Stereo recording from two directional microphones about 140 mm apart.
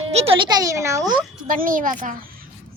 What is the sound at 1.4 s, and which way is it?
Speech, 75° right (ahead or behind).